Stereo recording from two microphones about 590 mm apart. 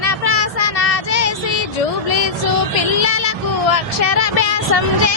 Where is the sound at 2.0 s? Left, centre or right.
Left.